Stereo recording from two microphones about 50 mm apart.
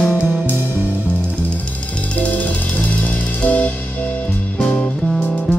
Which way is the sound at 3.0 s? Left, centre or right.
Left.